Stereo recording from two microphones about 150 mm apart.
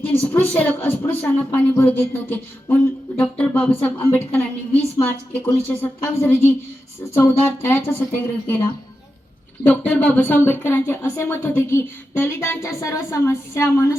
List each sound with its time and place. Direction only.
0.3 s speech: 10° left (ahead or behind)
9.6 s speech: 10° left (ahead or behind)